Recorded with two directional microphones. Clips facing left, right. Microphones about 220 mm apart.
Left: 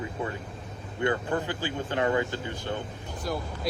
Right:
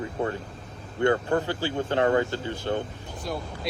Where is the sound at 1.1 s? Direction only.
50° right (ahead or behind).